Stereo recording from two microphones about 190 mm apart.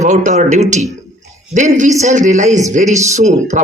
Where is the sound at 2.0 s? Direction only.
40° right (ahead or behind).